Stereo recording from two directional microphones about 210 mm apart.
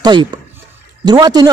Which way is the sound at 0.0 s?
20° right (ahead or behind).